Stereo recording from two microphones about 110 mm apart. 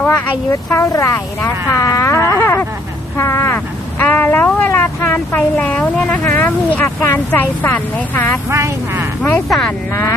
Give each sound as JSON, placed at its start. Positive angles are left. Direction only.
{"t": 0.0, "sound": "vehicle", "side_deg": 15}
{"t": 0.7, "sound": "speech", "side_deg": 25}
{"t": 2.2, "sound": "a sound", "side_deg": 20}
{"t": 3.2, "sound": "vehicle", "side_deg": 25}
{"t": 5.4, "sound": "speech", "side_deg": 10}
{"t": 8.4, "sound": "vehicle", "side_deg": -25}
{"t": 9.5, "sound": "speech", "side_deg": 5}
{"t": 9.9, "sound": "speech", "side_deg": 25}